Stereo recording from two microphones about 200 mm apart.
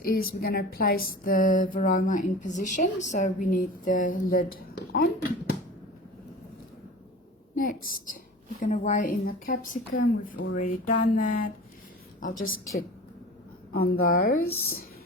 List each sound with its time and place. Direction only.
0.0 s speech: 50° left (ahead or behind)
7.5 s speech: 45° left (ahead or behind)
13.7 s speech: 50° left (ahead or behind)